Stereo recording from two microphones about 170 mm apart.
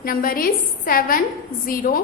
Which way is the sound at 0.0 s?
60° left (ahead or behind).